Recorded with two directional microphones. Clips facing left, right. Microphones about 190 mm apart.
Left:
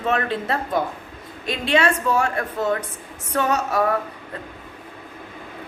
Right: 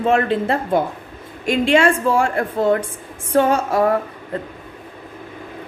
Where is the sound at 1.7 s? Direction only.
30° right (ahead or behind).